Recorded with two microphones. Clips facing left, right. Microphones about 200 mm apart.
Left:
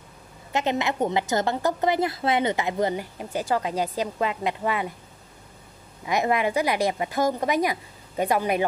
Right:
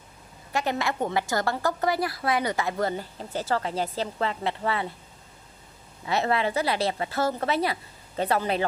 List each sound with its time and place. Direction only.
0.5 s a woman's voice: 20° left (ahead or behind)
6.0 s a woman's voice: 15° left (ahead or behind)